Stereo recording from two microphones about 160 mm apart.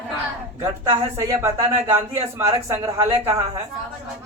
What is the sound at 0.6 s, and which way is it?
Speech, 25° right (ahead or behind).